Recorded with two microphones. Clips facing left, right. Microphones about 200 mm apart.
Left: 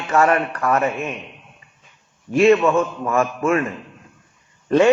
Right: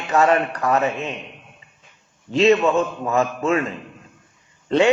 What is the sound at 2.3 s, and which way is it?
A man's voice, 20° right (ahead or behind).